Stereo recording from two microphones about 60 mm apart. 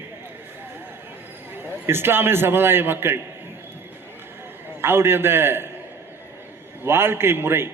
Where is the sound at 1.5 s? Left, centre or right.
Right.